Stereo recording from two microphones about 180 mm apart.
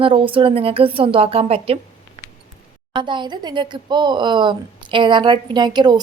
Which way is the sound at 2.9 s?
25° right (ahead or behind).